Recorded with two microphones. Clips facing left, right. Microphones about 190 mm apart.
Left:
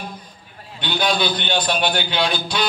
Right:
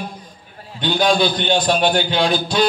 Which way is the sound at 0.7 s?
40° right (ahead or behind).